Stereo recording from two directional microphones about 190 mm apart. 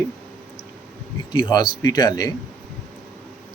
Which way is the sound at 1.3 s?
25° left (ahead or behind).